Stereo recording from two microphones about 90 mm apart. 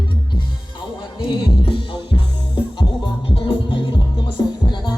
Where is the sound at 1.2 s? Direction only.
70° left (ahead or behind).